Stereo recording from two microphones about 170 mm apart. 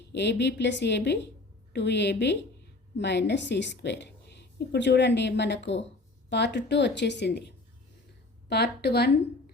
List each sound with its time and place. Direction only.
0.1 s a woman's voice: 90° left
8.4 s a woman's voice: 70° left (ahead or behind)